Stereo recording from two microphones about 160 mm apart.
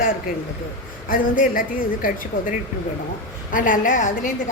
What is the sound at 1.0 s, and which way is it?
A woman's voice, 60° left (ahead or behind).